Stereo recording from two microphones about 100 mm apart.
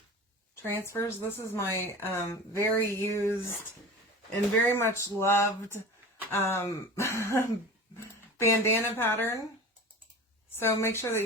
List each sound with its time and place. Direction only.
0.6 s speech: 25° left (ahead or behind)
1.6 s a woman's voice: 30° right (ahead or behind)
2.0 s speech: 25° left (ahead or behind)
4.7 s speech: 25° left (ahead or behind)
10.6 s speech: 25° left (ahead or behind)